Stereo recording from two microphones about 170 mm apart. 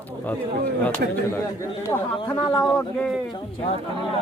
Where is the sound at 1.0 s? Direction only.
60° right (ahead or behind).